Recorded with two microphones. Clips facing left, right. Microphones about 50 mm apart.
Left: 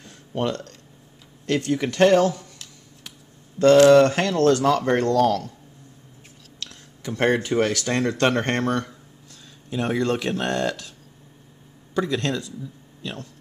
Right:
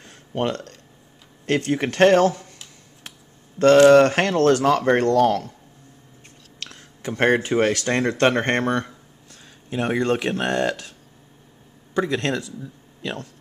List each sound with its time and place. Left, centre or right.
0.0 s a sound: right
1.4 s speech: right
3.9 s speech: right
7.0 s speech: right
8.0 s a sound: centre
9.8 s speech: centre
12.0 s speech: right
13.0 s speech: right